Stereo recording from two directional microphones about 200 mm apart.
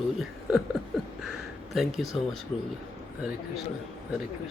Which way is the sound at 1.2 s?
Centre (ahead or behind).